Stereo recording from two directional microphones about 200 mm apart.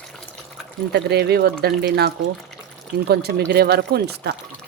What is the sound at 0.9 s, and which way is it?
Speech, 55° right (ahead or behind).